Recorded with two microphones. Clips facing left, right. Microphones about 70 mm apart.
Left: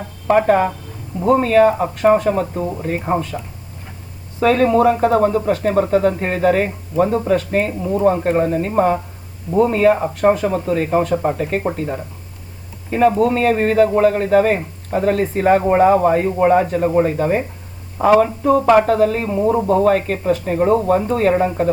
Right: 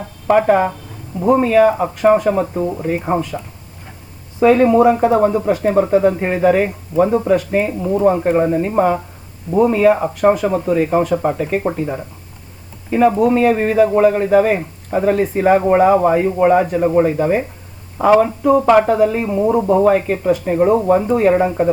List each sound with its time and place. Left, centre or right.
0.0 s speech: centre
4.4 s speech: centre